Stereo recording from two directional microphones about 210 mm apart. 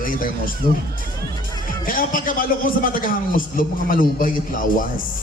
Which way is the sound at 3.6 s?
40° left (ahead or behind).